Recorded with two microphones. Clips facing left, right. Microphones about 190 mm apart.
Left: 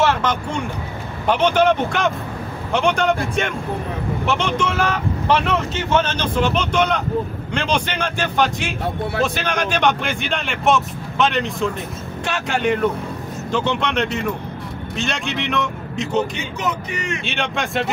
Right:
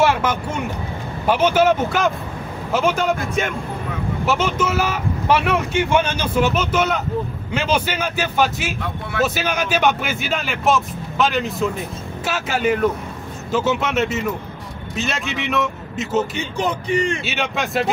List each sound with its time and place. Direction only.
0.0 s speech: 10° right (ahead or behind)
16.5 s speech: 30° right (ahead or behind)
17.2 s speech: 5° right (ahead or behind)